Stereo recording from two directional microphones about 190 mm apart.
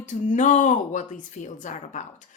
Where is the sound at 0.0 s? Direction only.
40° left (ahead or behind).